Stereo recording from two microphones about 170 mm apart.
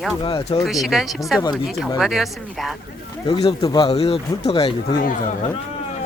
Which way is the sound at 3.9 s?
35° left (ahead or behind).